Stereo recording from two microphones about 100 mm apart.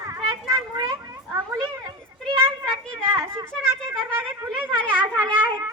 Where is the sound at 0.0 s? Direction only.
30° right (ahead or behind).